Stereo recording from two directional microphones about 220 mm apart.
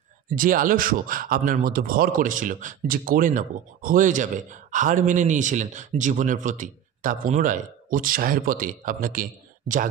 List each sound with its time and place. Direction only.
0.3 s speech: 40° right (ahead or behind)